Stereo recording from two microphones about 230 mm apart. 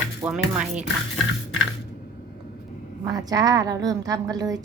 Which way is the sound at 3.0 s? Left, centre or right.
Centre.